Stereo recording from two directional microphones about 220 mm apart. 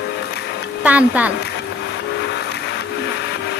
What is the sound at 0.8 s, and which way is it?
Music, 5° right (ahead or behind).